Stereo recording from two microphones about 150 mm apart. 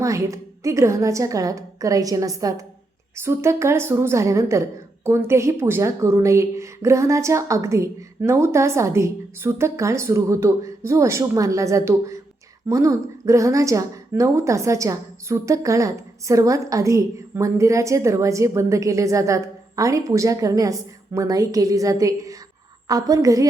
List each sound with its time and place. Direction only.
0.0 s a woman's voice: 20° right (ahead or behind)